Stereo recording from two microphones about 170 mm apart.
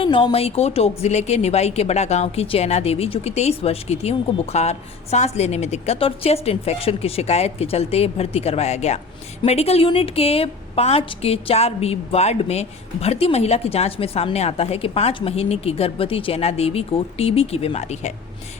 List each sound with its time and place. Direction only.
0.0 s a woman's voice: 30° left (ahead or behind)